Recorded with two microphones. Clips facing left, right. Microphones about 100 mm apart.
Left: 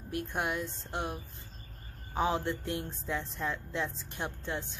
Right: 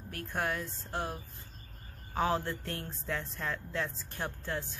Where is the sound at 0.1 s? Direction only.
20° left (ahead or behind).